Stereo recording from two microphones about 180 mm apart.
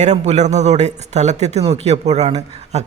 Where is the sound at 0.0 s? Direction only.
40° right (ahead or behind).